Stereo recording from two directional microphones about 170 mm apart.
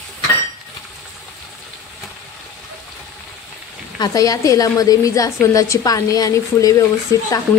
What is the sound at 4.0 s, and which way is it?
A woman's voice, 20° left (ahead or behind).